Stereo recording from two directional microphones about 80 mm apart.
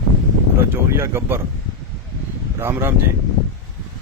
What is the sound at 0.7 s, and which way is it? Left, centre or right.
Speech, right.